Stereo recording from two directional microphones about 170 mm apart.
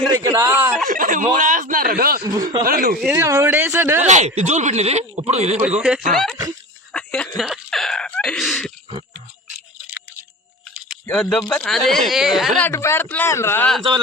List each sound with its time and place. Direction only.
0.1 s speech: 20° right (ahead or behind)
0.9 s speech: 55° right (ahead or behind)
2.2 s speech: 20° right (ahead or behind)
2.6 s speech: 60° right (ahead or behind)
3.2 s speech: 15° right (ahead or behind)
4.0 s speech: 45° right (ahead or behind)
6.1 s speech: centre (ahead or behind)
6.9 s a sound: 5° left (ahead or behind)
7.3 s cough: centre (ahead or behind)
11.0 s speech: 5° left (ahead or behind)
12.6 s speech: 15° left (ahead or behind)